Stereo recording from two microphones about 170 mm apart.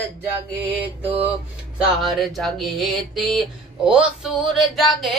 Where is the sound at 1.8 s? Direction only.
Centre (ahead or behind).